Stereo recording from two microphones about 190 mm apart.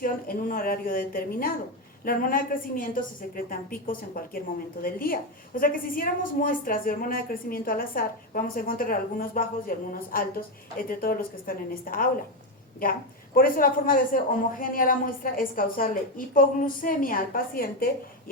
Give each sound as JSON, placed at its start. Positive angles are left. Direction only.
{"t": 0.0, "sound": "a woman's voice", "side_deg": 50}